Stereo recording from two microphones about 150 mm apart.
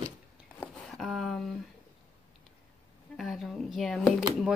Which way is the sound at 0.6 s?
Centre (ahead or behind).